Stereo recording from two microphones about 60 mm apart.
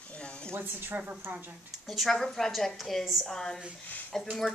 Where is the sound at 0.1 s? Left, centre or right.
Centre.